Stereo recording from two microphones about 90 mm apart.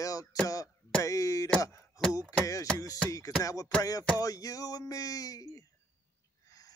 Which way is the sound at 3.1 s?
40° left (ahead or behind).